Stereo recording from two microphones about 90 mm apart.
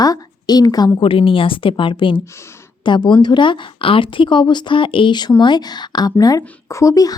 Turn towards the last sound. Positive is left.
turn(degrees=40)  # may be behind; listen again after turning